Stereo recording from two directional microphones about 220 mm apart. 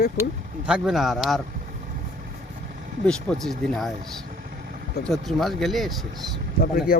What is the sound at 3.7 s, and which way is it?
Speech, centre (ahead or behind).